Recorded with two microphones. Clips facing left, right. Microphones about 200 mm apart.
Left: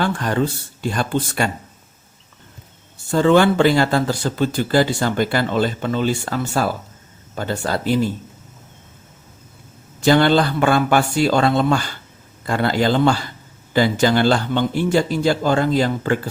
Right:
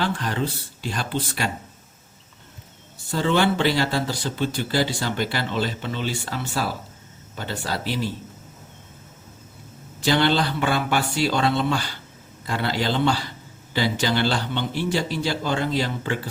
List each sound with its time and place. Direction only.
0.0 s speech: 50° left (ahead or behind)
3.1 s speech: 50° left (ahead or behind)
10.0 s speech: 50° left (ahead or behind)